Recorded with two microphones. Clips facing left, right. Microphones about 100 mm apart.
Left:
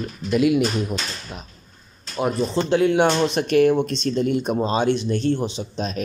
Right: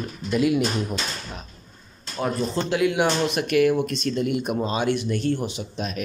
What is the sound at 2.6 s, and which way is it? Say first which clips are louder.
Speech: left 4 dB; 35° left (ahead or behind).